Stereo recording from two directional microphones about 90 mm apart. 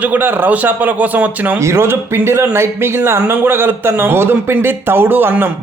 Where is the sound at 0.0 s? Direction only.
20° right (ahead or behind).